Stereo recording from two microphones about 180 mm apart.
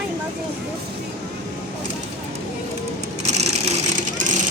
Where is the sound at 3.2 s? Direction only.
40° right (ahead or behind).